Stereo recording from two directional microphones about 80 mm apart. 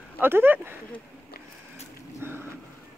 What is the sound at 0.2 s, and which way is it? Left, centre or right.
Speech, right.